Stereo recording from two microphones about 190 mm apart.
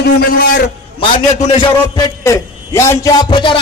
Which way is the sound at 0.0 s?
55° left (ahead or behind).